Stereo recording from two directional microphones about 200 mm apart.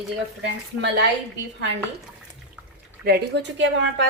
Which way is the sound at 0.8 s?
55° right (ahead or behind).